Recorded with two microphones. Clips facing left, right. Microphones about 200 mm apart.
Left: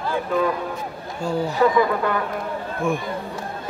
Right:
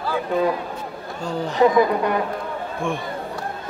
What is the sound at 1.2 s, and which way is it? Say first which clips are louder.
Speech: left 3 dB; 10° left (ahead or behind).